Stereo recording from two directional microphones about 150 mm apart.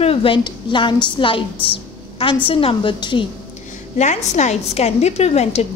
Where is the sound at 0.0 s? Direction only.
40° left (ahead or behind).